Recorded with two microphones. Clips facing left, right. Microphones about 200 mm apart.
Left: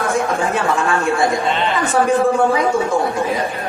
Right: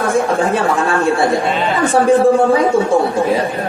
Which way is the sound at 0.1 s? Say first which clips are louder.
Right 5 dB; 30° right (ahead or behind).